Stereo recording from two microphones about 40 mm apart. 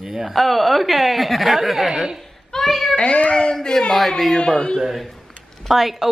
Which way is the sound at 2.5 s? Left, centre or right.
Centre.